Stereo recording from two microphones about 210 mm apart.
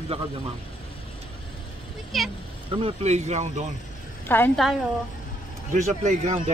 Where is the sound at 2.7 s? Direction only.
30° right (ahead or behind).